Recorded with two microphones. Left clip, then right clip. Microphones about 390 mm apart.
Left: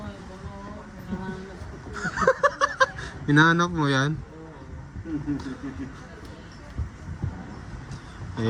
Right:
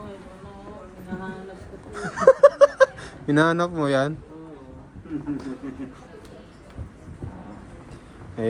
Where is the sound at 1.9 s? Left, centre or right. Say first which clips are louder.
Right 6 dB; centre.